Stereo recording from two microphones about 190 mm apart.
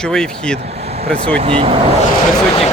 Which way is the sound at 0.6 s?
35° right (ahead or behind).